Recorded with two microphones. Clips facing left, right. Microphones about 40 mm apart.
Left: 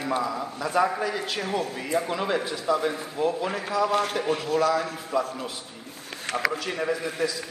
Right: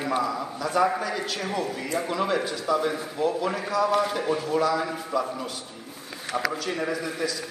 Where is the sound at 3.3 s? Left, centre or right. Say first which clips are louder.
Right 1 dB; left.